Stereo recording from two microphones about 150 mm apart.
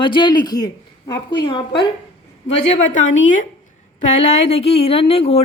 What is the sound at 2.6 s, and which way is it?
Speech, 50° left (ahead or behind).